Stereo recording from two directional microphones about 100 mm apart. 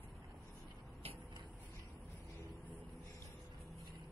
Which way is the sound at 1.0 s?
90° right.